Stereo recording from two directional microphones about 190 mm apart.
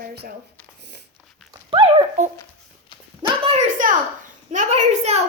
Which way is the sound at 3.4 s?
35° right (ahead or behind).